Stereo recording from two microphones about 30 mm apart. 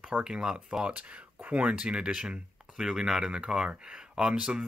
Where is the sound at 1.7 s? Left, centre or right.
Right.